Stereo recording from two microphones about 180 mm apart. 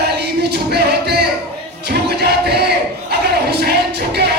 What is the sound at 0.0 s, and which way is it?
Music, 65° right (ahead or behind).